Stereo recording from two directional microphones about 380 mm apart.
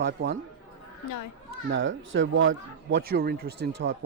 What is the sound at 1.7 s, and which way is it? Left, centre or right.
Speech, right.